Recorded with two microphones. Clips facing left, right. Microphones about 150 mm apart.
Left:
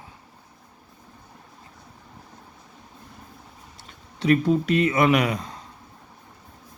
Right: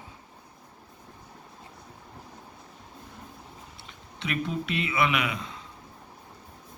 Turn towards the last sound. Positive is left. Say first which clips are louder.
# left 8 dB
turn(degrees=40)  # may be behind; listen again after turning